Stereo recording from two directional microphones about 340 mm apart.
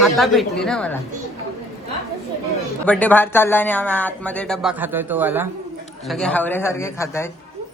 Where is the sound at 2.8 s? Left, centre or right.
Centre.